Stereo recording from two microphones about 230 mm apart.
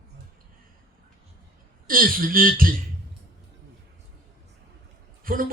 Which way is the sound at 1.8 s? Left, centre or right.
Right.